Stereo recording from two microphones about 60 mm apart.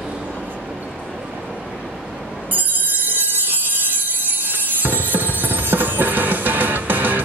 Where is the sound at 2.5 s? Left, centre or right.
Right.